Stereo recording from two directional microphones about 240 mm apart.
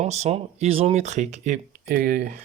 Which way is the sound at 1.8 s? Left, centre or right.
Right.